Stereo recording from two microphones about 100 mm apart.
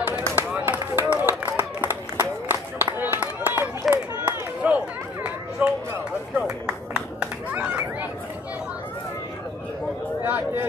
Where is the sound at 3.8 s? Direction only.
5° right (ahead or behind).